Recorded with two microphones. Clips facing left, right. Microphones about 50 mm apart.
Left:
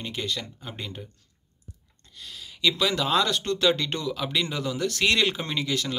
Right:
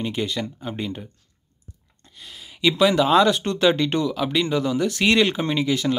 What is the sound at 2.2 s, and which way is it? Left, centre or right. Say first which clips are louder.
Speech: right 4 dB; centre.